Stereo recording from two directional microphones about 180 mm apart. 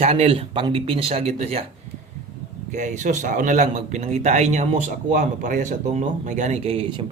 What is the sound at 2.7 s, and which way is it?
A man's voice, 45° right (ahead or behind).